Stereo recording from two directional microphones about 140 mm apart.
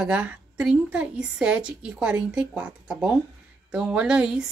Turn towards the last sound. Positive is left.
turn(degrees=-5)  # may be behind; listen again after turning